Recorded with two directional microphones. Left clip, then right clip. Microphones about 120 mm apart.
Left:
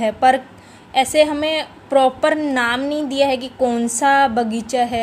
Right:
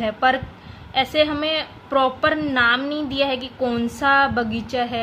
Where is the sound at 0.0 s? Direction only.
35° left (ahead or behind).